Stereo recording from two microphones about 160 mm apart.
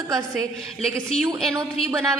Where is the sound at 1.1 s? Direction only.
5° left (ahead or behind).